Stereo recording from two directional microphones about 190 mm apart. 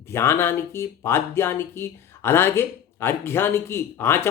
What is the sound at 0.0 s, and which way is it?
Speech, 15° left (ahead or behind).